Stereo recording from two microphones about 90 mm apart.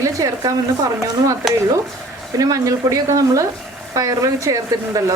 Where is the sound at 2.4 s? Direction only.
40° right (ahead or behind).